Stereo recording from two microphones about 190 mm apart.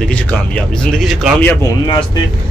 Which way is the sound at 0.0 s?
5° left (ahead or behind).